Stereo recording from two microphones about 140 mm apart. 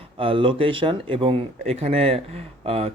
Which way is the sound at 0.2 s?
40° right (ahead or behind).